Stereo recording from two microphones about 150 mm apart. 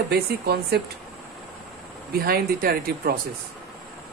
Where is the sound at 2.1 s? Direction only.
80° right.